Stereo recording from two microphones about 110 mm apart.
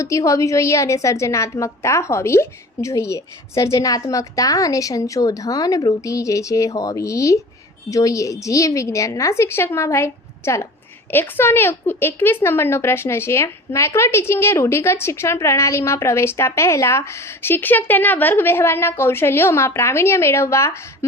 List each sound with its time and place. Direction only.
0.0 s a woman's voice: 30° left (ahead or behind)